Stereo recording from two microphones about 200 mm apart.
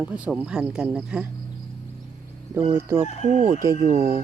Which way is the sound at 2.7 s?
10° right (ahead or behind).